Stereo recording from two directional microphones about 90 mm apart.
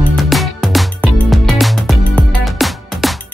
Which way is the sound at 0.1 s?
Centre (ahead or behind).